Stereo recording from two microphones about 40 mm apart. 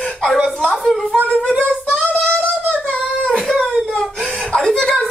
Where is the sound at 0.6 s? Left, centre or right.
Left.